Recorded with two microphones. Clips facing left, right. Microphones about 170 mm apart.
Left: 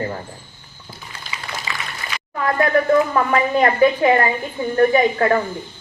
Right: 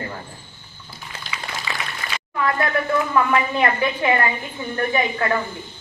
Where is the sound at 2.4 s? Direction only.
35° left (ahead or behind).